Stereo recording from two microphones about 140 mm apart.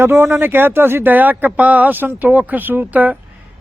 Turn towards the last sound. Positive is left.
turn(degrees=-10)  # may be behind; listen again after turning